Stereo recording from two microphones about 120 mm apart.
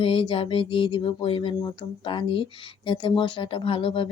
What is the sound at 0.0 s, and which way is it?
Speech, 45° left (ahead or behind).